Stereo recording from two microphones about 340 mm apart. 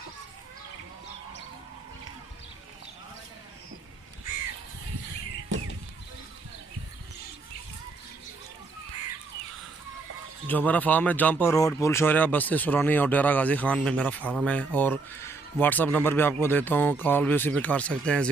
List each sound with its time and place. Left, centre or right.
10.4 s speech: centre